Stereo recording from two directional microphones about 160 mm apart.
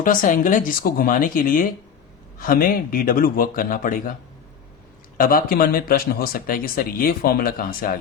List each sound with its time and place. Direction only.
0.0 s speech: 55° left (ahead or behind)
5.1 s speech: 65° left (ahead or behind)